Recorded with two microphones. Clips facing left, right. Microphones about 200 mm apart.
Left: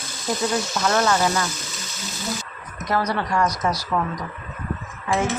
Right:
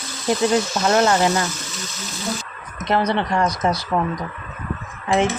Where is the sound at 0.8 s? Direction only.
25° right (ahead or behind).